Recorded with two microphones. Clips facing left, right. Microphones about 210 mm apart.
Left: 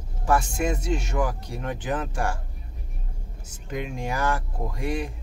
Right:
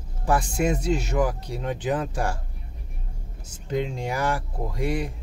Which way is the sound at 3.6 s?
20° right (ahead or behind).